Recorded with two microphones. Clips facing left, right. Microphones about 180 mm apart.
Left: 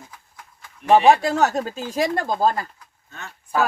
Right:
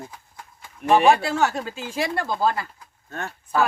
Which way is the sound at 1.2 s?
40° left (ahead or behind).